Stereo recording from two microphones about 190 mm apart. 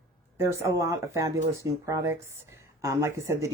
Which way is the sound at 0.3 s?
15° right (ahead or behind).